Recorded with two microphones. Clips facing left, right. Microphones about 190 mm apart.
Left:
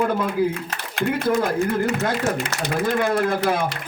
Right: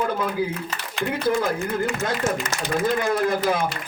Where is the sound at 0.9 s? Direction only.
55° left (ahead or behind).